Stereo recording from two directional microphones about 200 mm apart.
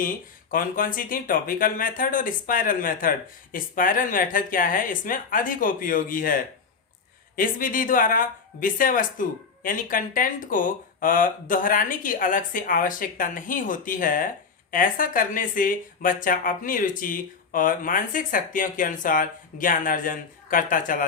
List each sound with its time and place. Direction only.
0.5 s speech: 45° left (ahead or behind)